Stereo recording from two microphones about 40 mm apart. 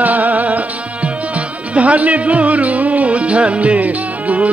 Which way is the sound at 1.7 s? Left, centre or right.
Right.